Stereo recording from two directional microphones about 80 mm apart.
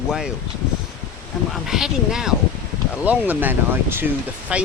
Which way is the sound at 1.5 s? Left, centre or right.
Centre.